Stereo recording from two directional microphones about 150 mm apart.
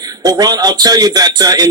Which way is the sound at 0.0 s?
25° right (ahead or behind).